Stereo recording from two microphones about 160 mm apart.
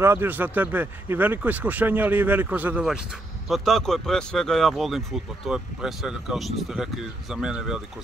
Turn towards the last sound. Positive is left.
turn(degrees=-5)  # may be behind; listen again after turning